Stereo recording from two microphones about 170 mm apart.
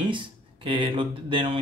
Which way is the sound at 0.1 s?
30° right (ahead or behind).